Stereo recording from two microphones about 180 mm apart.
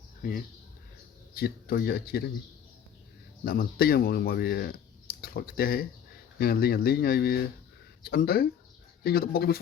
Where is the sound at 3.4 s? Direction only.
55° left (ahead or behind).